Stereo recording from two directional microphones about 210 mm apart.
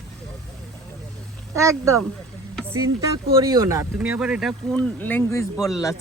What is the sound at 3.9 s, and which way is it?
Speech, 5° right (ahead or behind).